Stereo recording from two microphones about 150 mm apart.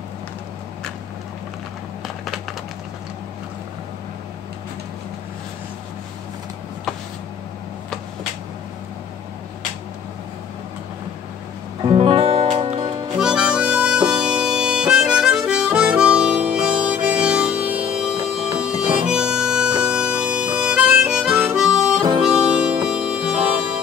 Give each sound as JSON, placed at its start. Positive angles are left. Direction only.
{"t": 11.8, "sound": "music", "side_deg": -35}
{"t": 13.2, "sound": "harmonica", "side_deg": -5}